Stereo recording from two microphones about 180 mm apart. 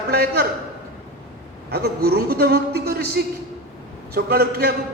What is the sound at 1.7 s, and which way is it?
A man's voice, 60° right (ahead or behind).